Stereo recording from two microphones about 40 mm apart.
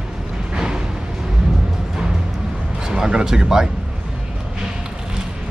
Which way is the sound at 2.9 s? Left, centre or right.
Centre.